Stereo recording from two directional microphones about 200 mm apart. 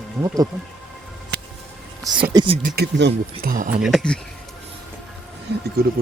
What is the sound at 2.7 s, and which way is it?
Speech, 55° right (ahead or behind).